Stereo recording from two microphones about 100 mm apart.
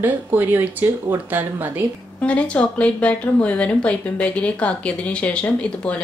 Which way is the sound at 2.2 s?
10° left (ahead or behind).